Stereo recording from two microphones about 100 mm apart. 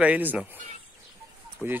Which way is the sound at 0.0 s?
15° right (ahead or behind).